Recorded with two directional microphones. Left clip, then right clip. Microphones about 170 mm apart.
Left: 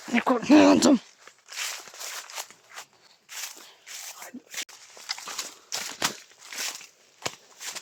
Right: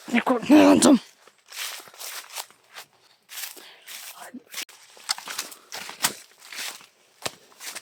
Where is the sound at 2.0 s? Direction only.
25° right (ahead or behind).